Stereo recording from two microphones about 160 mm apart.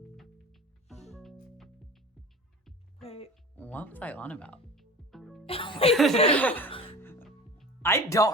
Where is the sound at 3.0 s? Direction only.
35° left (ahead or behind).